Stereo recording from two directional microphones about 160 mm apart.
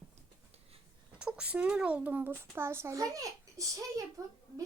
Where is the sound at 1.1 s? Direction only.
5° right (ahead or behind).